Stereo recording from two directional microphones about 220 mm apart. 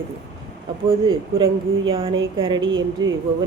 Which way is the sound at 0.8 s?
25° right (ahead or behind).